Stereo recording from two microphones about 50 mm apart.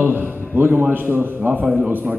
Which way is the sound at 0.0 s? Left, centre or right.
Right.